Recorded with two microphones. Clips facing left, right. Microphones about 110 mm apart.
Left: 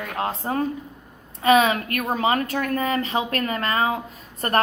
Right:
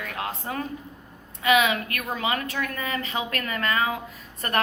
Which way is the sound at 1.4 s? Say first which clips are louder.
Left 4 dB; 35° left (ahead or behind).